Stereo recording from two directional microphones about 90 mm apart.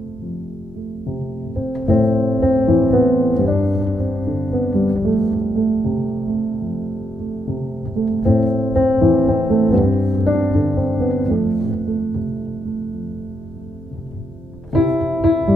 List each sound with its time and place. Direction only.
1.7 s music: centre (ahead or behind)
8.0 s music: centre (ahead or behind)
14.7 s music: centre (ahead or behind)